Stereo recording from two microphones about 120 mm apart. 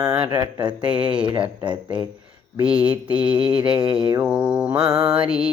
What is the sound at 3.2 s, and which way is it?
Mantra, 40° right (ahead or behind).